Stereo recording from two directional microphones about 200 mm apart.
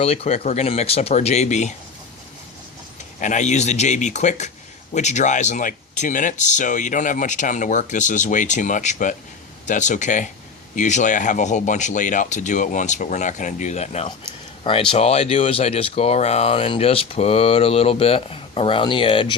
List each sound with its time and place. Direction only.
0.0 s speech: 30° left (ahead or behind)
3.2 s speech: 40° left (ahead or behind)